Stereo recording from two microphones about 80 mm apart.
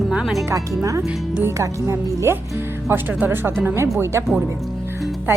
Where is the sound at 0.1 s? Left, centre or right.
Centre.